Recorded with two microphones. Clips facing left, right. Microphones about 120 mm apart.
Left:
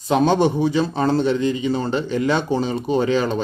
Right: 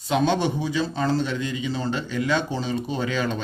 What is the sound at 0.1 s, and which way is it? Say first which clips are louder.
A man's voice: left 5 dB; 40° left (ahead or behind).